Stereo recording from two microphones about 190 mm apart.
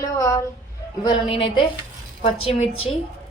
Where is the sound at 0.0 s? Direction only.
15° left (ahead or behind).